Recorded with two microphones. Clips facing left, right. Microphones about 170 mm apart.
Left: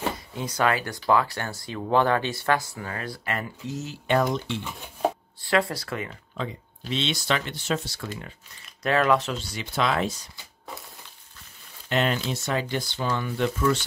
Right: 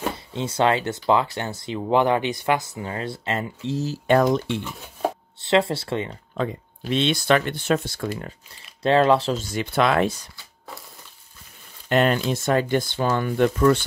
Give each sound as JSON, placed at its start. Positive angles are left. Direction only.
{"t": 0.3, "sound": "speech", "side_deg": -25}
{"t": 5.4, "sound": "speech", "side_deg": -25}
{"t": 6.3, "sound": "speech", "side_deg": -50}
{"t": 8.8, "sound": "speech", "side_deg": -30}
{"t": 9.4, "sound": "speech", "side_deg": -50}
{"t": 11.9, "sound": "speech", "side_deg": -50}